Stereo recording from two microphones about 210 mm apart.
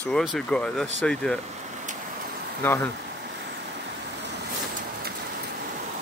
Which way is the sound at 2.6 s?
10° left (ahead or behind).